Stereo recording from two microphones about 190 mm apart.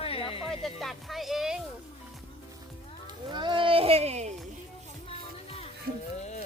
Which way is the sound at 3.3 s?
25° right (ahead or behind).